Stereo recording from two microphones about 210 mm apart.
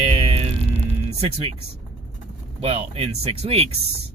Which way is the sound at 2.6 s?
30° right (ahead or behind).